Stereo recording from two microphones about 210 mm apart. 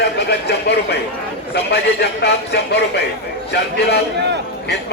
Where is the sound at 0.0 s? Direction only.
50° left (ahead or behind).